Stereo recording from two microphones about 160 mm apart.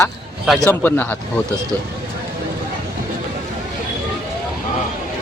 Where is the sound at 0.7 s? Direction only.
10° left (ahead or behind).